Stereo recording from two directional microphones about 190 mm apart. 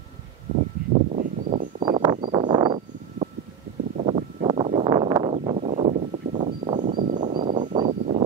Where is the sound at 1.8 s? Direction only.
25° right (ahead or behind).